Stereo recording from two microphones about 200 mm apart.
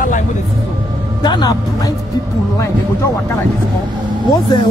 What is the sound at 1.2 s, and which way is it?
Speech, 20° left (ahead or behind).